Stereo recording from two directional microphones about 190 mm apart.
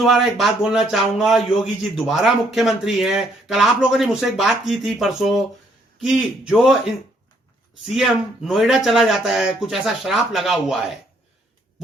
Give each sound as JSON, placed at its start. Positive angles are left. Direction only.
{"t": 0.0, "sound": "speech", "side_deg": 0}
{"t": 7.9, "sound": "speech", "side_deg": 0}